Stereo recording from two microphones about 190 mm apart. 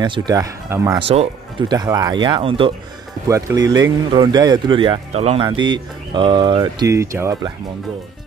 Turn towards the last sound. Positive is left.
turn(degrees=-15)  # may be behind; listen again after turning